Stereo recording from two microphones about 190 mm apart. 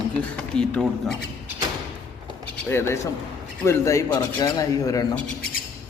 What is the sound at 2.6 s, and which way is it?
A man's voice, 10° left (ahead or behind).